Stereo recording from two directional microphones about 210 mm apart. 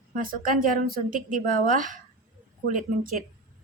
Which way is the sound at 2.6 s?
40° right (ahead or behind).